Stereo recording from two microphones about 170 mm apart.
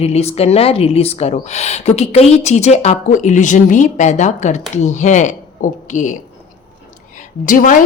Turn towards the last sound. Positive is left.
turn(degrees=50)  # may be behind; listen again after turning